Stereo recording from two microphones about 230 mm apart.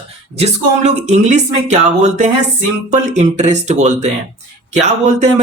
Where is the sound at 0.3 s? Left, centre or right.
Right.